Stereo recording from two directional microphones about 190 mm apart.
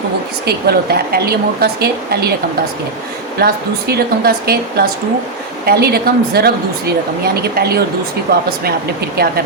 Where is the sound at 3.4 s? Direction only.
55° right (ahead or behind).